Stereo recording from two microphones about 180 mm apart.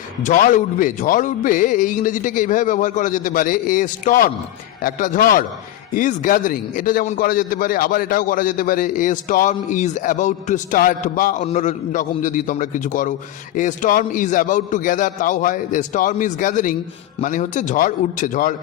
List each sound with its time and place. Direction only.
0.2 s a man's voice: 45° left (ahead or behind)